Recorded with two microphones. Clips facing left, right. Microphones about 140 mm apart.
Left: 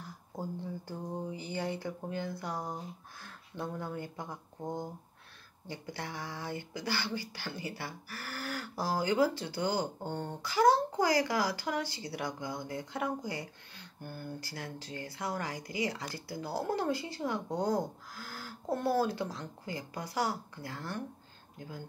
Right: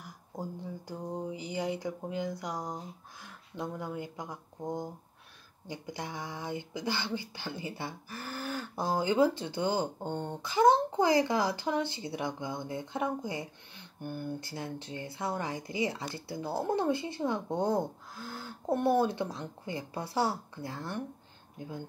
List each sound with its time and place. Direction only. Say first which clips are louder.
0.0 s speech: even; 15° right (ahead or behind)